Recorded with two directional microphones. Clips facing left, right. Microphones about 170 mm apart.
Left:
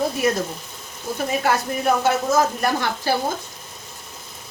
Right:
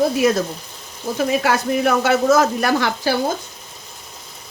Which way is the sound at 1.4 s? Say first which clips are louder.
Right 4 dB; 90° right.